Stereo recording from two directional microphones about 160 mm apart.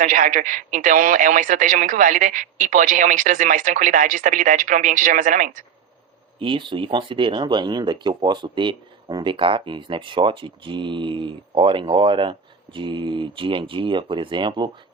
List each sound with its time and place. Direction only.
0.0 s a man's voice: 55° right (ahead or behind)
6.4 s speech: 30° right (ahead or behind)